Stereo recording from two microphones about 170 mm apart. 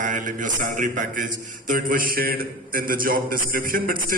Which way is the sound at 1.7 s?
55° right (ahead or behind).